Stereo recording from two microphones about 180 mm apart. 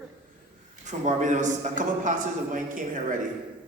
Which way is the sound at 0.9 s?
40° right (ahead or behind).